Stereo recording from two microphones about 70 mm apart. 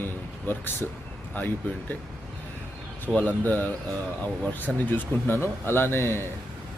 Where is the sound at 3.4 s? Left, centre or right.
Left.